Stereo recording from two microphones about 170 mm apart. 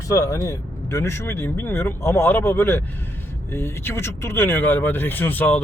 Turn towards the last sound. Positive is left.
turn(degrees=10)  # may be behind; listen again after turning